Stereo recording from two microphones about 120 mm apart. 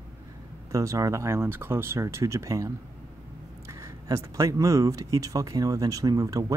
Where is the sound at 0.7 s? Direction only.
25° right (ahead or behind).